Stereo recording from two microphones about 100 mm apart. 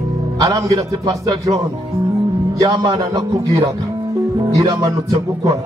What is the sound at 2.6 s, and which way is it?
A man's voice, 35° right (ahead or behind).